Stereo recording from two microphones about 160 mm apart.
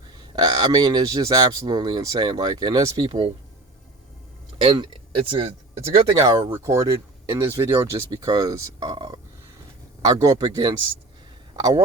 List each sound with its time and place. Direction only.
0.4 s speech: 25° right (ahead or behind)
4.5 s speech: 30° right (ahead or behind)
6.2 s speech: 25° right (ahead or behind)